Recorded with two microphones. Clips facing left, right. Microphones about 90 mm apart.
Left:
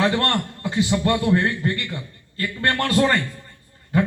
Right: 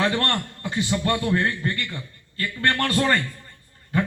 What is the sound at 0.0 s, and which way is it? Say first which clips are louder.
A man's voice: left 3 dB; 20° left (ahead or behind).